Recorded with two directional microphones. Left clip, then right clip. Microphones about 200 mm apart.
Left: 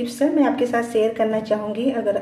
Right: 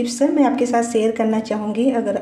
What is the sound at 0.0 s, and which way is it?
A woman's voice, 30° right (ahead or behind).